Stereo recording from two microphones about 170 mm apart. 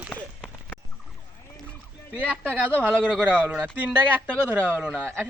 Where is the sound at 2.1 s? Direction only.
10° right (ahead or behind).